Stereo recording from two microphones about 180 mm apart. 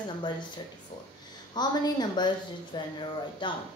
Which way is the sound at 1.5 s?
25° left (ahead or behind).